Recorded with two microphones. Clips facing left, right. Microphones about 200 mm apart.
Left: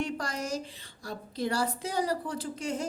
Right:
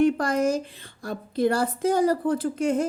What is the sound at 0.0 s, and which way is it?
A woman's voice, 55° right (ahead or behind).